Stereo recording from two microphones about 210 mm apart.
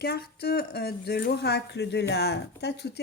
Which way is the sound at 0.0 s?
50° left (ahead or behind).